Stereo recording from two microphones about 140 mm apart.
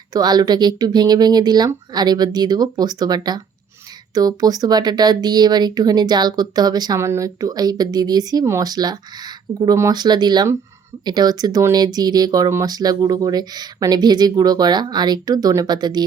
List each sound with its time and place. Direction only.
0.1 s speech: 30° right (ahead or behind)